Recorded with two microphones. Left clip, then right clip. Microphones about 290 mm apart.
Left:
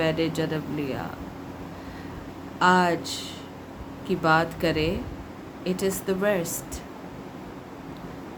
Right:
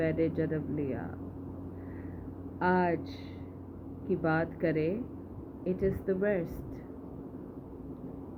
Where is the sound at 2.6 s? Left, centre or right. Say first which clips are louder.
Left 8 dB; centre.